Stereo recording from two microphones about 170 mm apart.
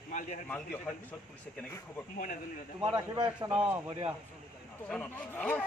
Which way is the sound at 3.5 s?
10° right (ahead or behind).